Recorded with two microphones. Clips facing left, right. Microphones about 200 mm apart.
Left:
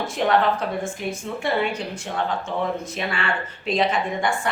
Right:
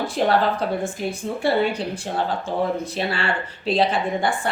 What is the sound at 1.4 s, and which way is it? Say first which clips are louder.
A woman's voice: right 4 dB; 35° right (ahead or behind).